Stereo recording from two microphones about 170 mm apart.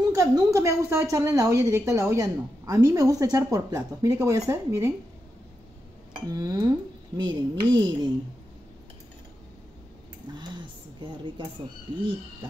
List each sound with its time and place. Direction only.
0.1 s a woman's voice: 20° right (ahead or behind)
6.2 s a woman's voice: 20° right (ahead or behind)
10.3 s a sound: 25° right (ahead or behind)